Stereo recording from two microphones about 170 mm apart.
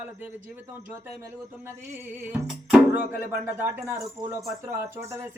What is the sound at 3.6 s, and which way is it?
Speech, 15° right (ahead or behind).